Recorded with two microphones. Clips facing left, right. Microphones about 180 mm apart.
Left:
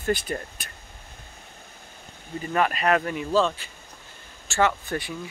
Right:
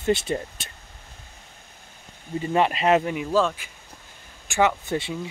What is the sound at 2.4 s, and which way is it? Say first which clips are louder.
Speech: right 2 dB; 25° right (ahead or behind).